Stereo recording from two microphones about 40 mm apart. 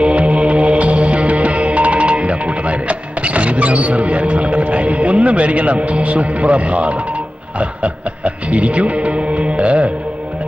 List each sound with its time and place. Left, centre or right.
0.0 s music: right